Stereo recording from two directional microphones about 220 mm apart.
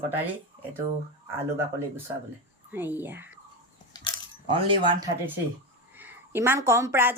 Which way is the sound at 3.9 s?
20° left (ahead or behind).